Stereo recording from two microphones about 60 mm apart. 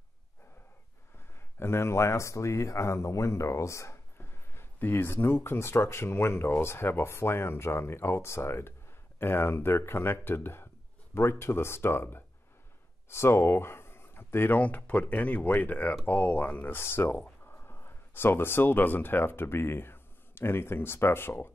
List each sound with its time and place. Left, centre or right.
1.6 s speech: left
4.2 s speech: left
14.6 s speech: left